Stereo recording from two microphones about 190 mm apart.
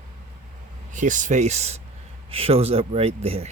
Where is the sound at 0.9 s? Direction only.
40° right (ahead or behind).